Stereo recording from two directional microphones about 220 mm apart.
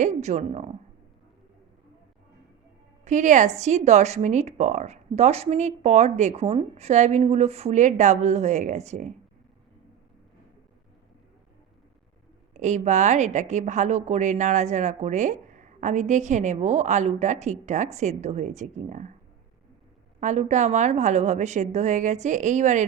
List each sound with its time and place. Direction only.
0.0 s a woman's voice: 30° right (ahead or behind)
3.0 s a woman's voice: 35° right (ahead or behind)
12.5 s a woman's voice: 35° right (ahead or behind)
20.1 s a woman's voice: 30° right (ahead or behind)